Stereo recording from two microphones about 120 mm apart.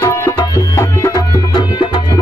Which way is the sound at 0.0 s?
30° left (ahead or behind).